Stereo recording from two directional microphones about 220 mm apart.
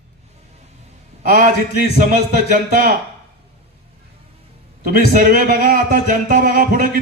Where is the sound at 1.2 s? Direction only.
40° right (ahead or behind).